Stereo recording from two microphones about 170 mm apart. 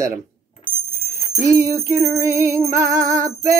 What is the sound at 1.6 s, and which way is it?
Music, 15° right (ahead or behind).